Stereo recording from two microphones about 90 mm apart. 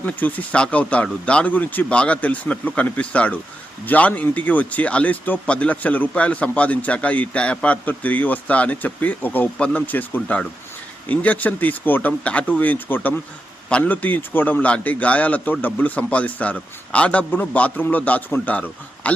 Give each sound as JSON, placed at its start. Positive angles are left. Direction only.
{"t": 0.0, "sound": "speech", "side_deg": 20}